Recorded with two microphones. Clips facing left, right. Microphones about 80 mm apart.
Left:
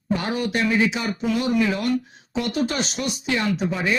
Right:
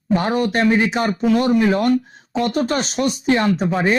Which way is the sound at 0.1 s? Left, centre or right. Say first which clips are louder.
Right 6 dB; right.